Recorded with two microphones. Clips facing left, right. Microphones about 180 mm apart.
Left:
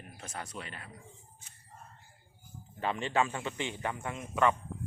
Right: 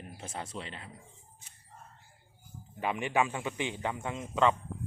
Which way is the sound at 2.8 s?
15° right (ahead or behind).